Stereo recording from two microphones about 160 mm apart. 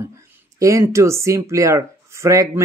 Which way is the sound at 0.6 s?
20° right (ahead or behind).